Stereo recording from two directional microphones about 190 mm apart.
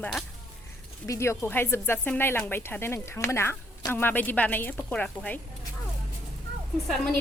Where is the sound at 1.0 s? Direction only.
15° left (ahead or behind).